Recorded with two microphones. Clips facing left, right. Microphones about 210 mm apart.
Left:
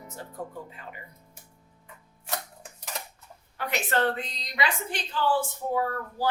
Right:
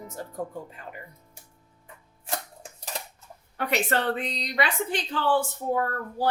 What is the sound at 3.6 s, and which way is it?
A woman's voice, 60° right (ahead or behind).